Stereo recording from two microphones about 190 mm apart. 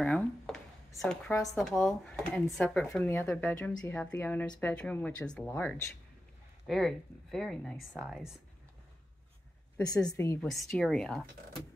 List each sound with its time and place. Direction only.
0.0 s a sound: 5° left (ahead or behind)
1.3 s speech: 15° left (ahead or behind)
1.6 s speech: 5° left (ahead or behind)
10.0 s speech: 15° left (ahead or behind)
10.5 s speech: centre (ahead or behind)